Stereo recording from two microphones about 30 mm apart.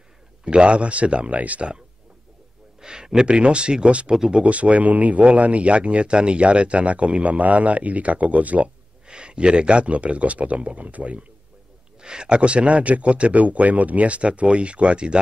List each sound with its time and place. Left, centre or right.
0.5 s speech: right
1.3 s speech: right
2.8 s a sound: right
3.3 s speech: right
4.1 s speech: right
4.4 s speech: right
9.0 s speech: right
12.0 s speech: right
13.4 s speech: right